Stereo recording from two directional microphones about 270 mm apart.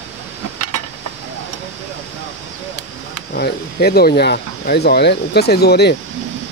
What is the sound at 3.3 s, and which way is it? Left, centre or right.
Speech, left.